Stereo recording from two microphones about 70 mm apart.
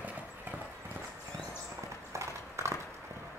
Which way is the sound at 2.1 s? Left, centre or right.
Right.